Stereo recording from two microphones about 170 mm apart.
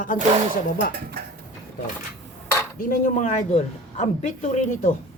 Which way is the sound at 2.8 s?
50° left (ahead or behind).